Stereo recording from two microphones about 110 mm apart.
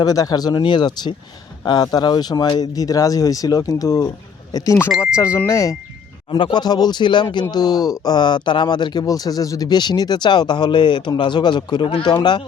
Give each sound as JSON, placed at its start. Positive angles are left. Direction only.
{"t": 0.0, "sound": "speech", "side_deg": 35}
{"t": 6.3, "sound": "speech", "side_deg": 45}